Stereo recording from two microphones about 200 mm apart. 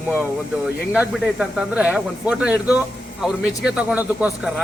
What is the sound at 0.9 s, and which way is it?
Speech, 5° right (ahead or behind).